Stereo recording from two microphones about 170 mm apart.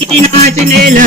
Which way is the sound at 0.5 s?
50° right (ahead or behind).